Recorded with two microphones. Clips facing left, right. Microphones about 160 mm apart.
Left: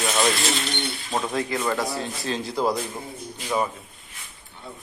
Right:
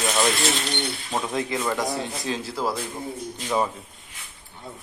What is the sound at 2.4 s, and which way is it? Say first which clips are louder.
A man's voice: left 3 dB; 5° right (ahead or behind).